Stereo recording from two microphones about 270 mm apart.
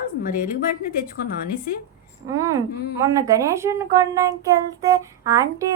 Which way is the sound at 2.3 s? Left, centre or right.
Centre.